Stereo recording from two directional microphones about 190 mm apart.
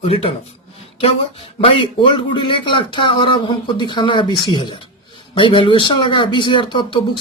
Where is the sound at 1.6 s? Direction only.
30° left (ahead or behind).